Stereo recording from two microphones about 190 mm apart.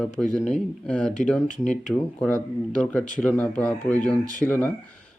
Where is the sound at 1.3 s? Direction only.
5° left (ahead or behind).